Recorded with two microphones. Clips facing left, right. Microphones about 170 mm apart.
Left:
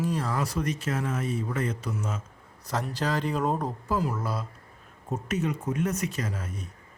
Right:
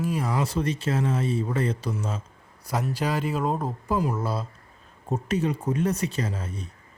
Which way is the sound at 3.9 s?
20° right (ahead or behind).